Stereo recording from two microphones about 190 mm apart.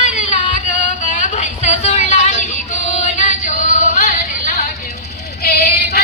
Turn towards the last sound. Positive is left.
turn(degrees=55)  # may be behind; listen again after turning